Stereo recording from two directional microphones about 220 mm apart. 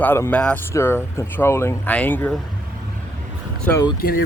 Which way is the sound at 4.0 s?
45° left (ahead or behind).